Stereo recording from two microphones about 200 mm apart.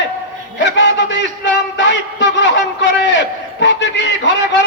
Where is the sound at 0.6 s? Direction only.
65° left (ahead or behind).